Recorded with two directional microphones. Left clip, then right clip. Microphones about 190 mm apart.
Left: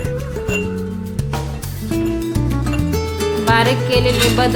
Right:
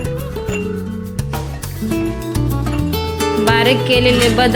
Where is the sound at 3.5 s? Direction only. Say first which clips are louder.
Right 2 dB; 20° right (ahead or behind).